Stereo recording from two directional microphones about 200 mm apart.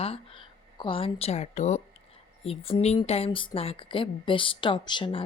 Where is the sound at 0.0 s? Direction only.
30° left (ahead or behind).